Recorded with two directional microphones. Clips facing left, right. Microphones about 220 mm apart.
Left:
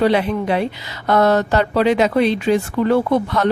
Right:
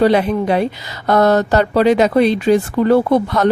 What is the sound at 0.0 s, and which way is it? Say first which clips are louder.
Speech: right 3 dB; 40° right (ahead or behind).